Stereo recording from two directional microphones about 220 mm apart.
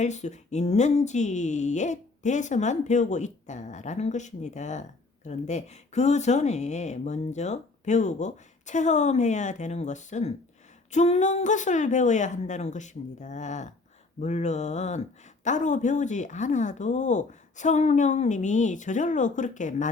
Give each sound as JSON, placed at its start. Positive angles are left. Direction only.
{"t": 0.0, "sound": "speech", "side_deg": 30}